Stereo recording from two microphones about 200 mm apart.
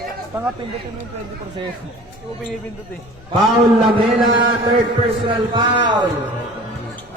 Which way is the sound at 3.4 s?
Centre (ahead or behind).